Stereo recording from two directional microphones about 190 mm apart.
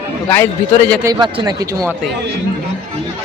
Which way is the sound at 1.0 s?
20° right (ahead or behind).